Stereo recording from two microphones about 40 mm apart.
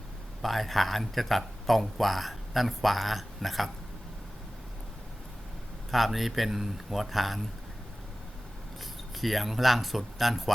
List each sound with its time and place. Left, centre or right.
0.4 s speech: centre
5.9 s speech: centre
9.1 s speech: centre